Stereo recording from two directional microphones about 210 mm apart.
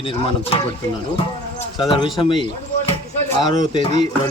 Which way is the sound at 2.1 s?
25° left (ahead or behind).